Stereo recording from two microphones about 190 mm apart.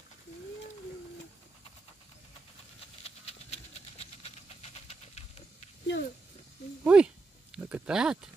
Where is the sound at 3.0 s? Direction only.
35° left (ahead or behind).